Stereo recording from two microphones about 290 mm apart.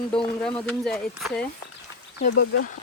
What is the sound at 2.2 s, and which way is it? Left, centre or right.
Speech, left.